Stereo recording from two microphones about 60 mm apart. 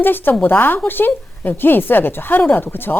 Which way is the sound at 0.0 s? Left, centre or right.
Left.